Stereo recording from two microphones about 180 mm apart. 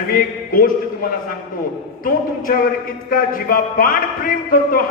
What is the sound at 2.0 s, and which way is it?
A man's voice, 50° left (ahead or behind).